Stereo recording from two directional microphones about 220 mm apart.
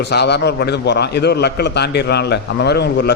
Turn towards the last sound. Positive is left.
turn(degrees=50)  # may be behind; listen again after turning